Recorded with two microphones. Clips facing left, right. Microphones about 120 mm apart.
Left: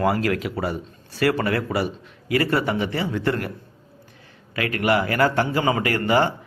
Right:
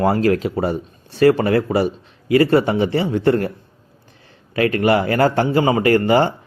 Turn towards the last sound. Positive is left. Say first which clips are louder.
# right 6 dB
turn(degrees=-30)  # may be behind; listen again after turning